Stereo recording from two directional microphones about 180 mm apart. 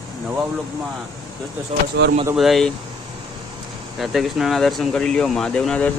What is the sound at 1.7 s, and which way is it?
Speech, 40° right (ahead or behind).